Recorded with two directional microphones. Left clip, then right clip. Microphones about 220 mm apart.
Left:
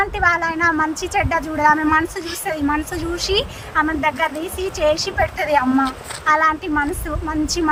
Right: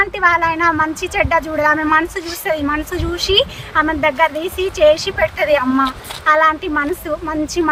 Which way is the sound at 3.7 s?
15° right (ahead or behind).